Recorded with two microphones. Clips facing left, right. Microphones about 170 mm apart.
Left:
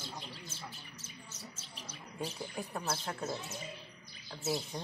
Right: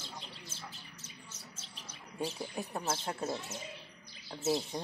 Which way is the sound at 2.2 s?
20° right (ahead or behind).